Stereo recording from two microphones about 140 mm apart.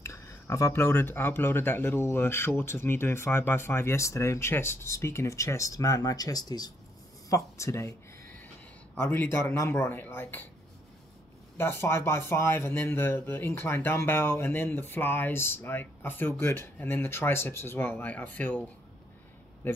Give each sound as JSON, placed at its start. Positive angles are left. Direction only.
{"t": 0.0, "sound": "speech", "side_deg": 20}
{"t": 8.9, "sound": "speech", "side_deg": 15}
{"t": 11.5, "sound": "speech", "side_deg": 15}